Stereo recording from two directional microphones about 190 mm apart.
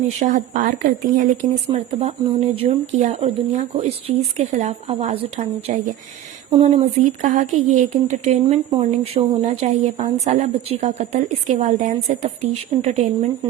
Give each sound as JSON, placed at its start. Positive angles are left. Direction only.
{"t": 0.2, "sound": "speech", "side_deg": -40}